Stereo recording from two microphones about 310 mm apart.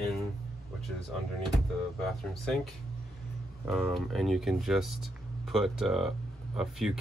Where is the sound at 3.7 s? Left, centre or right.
Centre.